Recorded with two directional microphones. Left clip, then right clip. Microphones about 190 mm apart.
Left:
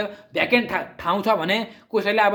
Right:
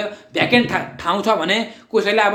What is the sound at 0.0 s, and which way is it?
Speech, 25° left (ahead or behind).